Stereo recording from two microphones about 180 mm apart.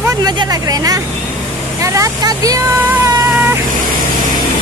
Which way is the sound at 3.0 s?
10° right (ahead or behind).